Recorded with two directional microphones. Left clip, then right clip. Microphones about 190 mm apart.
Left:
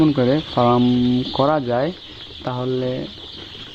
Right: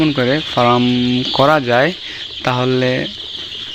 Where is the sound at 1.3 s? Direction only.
20° right (ahead or behind).